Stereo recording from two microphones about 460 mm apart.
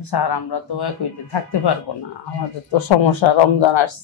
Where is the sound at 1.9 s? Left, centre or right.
Left.